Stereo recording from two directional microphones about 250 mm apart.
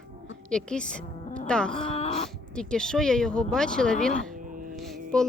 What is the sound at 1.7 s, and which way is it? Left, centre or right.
Speech, left.